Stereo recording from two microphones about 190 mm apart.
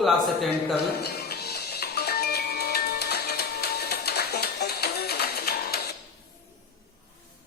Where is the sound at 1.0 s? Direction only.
55° left (ahead or behind).